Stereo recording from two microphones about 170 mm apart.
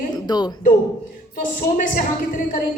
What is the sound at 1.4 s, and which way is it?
A woman's voice, 50° left (ahead or behind).